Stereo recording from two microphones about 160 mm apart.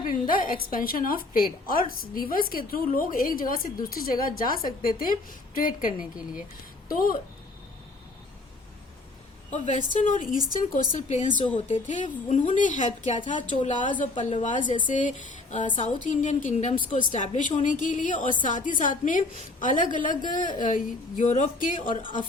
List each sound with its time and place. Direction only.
0.0 s a woman's voice: 60° left (ahead or behind)
9.5 s a woman's voice: 45° left (ahead or behind)